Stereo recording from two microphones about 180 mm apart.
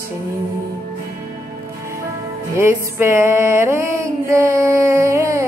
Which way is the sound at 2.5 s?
15° right (ahead or behind).